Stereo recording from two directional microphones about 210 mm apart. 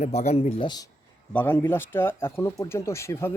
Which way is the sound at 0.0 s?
30° left (ahead or behind).